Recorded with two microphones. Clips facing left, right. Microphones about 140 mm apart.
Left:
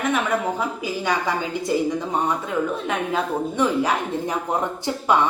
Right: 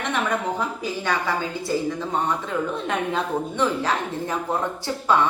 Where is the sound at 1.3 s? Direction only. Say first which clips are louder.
Left 1 dB; 15° left (ahead or behind).